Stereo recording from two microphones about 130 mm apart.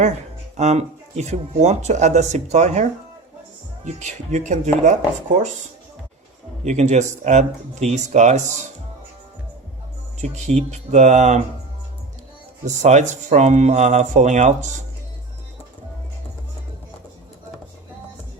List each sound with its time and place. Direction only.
0.5 s speech: 60° right (ahead or behind)
3.8 s speech: 65° right (ahead or behind)
6.7 s speech: 60° right (ahead or behind)
10.2 s speech: 65° right (ahead or behind)
12.6 s speech: 65° right (ahead or behind)